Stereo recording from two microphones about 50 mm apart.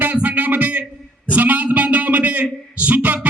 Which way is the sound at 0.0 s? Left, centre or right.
Right.